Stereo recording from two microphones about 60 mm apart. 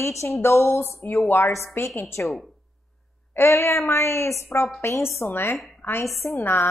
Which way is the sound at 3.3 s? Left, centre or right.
Left.